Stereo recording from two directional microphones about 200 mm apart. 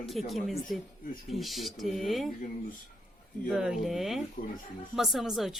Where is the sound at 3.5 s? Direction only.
Centre (ahead or behind).